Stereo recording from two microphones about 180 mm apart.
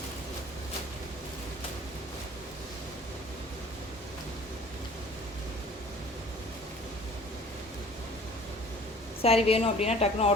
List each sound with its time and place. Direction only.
9.2 s a woman's voice: 35° left (ahead or behind)